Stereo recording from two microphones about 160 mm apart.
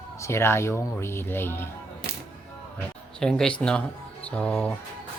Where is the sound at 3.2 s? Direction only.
5° left (ahead or behind).